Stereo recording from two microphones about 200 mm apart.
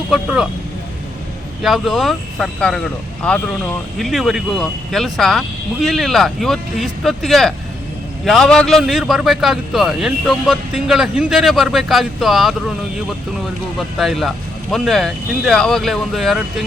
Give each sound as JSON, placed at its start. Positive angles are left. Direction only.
{"t": 0.1, "sound": "a man's voice", "side_deg": -5}
{"t": 1.6, "sound": "a man's voice", "side_deg": 0}
{"t": 13.7, "sound": "a man's voice", "side_deg": 0}